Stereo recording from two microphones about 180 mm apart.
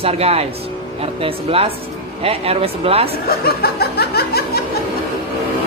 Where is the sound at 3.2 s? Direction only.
60° left (ahead or behind).